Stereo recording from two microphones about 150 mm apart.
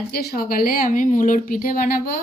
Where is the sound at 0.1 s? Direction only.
85° left.